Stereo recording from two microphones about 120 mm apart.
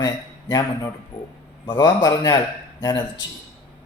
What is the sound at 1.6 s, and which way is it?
Speech, 40° left (ahead or behind).